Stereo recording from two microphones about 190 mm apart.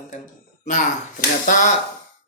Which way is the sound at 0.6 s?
40° left (ahead or behind).